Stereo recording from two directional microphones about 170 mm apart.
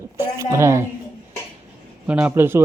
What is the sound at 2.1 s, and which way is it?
Speech, 10° right (ahead or behind).